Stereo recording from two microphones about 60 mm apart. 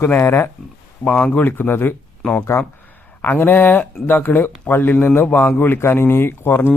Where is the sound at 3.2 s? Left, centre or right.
Left.